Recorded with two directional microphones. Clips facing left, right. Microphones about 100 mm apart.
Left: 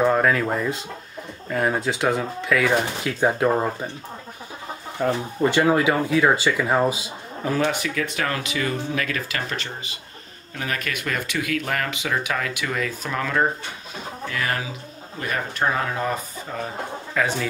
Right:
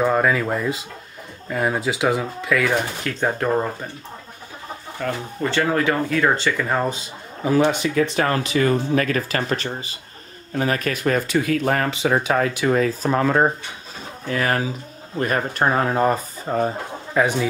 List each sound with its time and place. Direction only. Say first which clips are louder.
0.0 s speech: even; centre (ahead or behind)
3.0 s speech: left 2 dB; 10° left (ahead or behind)
5.0 s speech: left 4 dB; 15° left (ahead or behind)
7.4 s speech: right 5 dB; 15° right (ahead or behind)
7.8 s speech: right 6 dB; 30° right (ahead or behind)
17.1 s speech: right 5 dB; 20° right (ahead or behind)